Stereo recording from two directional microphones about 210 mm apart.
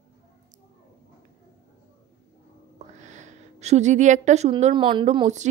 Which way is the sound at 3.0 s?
35° right (ahead or behind).